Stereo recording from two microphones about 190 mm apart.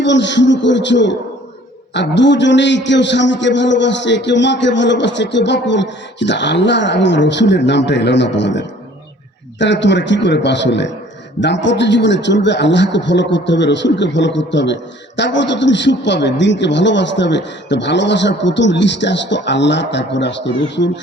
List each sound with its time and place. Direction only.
0.0 s a man's voice: 70° left (ahead or behind)